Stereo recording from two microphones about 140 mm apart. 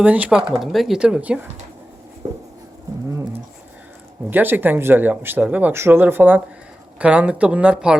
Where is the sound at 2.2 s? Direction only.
25° right (ahead or behind).